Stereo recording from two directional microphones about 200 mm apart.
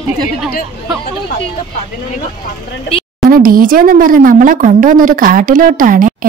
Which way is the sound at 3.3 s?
45° right (ahead or behind).